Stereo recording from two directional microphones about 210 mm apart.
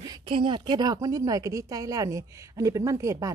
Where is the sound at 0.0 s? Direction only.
20° right (ahead or behind).